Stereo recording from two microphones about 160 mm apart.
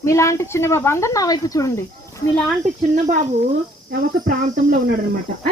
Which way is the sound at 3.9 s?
60° right (ahead or behind).